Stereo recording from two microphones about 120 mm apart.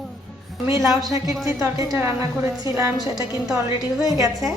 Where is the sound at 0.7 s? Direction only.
30° right (ahead or behind).